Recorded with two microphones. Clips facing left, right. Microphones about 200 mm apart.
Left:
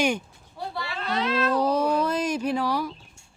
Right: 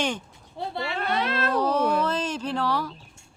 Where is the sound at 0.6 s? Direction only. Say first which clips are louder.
Right 2 dB; 25° right (ahead or behind).